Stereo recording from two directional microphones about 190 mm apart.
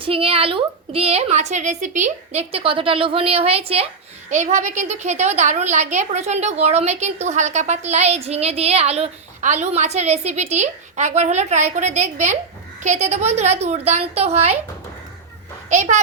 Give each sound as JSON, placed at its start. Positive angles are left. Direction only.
{"t": 0.0, "sound": "a woman's voice", "side_deg": -30}
{"t": 15.7, "sound": "a woman's voice", "side_deg": -40}